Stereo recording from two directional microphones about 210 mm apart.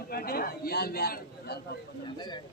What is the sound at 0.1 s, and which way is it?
A man's voice, 45° left (ahead or behind).